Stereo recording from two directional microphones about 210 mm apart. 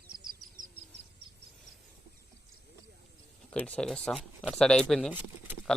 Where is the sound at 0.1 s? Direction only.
50° right (ahead or behind).